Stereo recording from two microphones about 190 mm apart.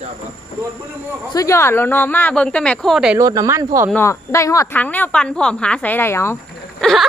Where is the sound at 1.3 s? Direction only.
15° left (ahead or behind); by 3.2 s centre (ahead or behind).